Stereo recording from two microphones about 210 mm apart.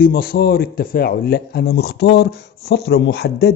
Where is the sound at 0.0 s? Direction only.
45° left (ahead or behind).